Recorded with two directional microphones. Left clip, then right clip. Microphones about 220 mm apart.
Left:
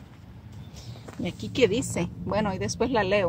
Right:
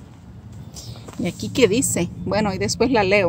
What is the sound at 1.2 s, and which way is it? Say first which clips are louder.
A woman's voice: right 5 dB; 20° right (ahead or behind).